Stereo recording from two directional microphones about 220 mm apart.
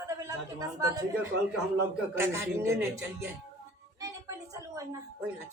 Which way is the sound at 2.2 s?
10° right (ahead or behind).